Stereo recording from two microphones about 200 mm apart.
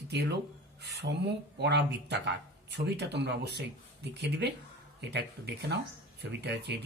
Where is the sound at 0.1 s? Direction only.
60° right (ahead or behind).